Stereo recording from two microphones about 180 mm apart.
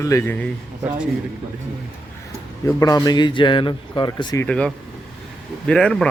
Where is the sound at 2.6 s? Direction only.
20° left (ahead or behind).